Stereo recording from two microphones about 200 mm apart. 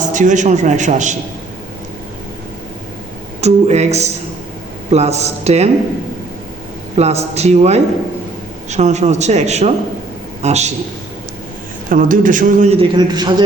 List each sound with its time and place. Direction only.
0.1 s a man's voice: 40° right (ahead or behind)
3.4 s a man's voice: 35° right (ahead or behind)
6.9 s a man's voice: 30° right (ahead or behind)
11.9 s a man's voice: 45° right (ahead or behind); by 13.4 s 20° right (ahead or behind)